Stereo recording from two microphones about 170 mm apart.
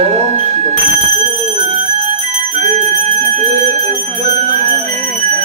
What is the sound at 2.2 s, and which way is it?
Bell, 45° right (ahead or behind).